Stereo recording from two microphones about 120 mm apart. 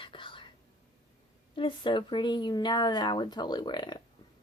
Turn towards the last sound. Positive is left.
turn(degrees=35)  # may be behind; listen again after turning